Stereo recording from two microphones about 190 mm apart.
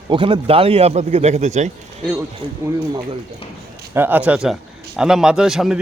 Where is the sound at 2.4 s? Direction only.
25° right (ahead or behind).